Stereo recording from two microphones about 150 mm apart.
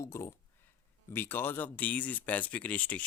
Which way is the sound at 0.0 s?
20° left (ahead or behind).